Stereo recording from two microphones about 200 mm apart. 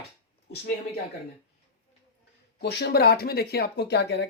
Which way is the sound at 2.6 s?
55° left (ahead or behind).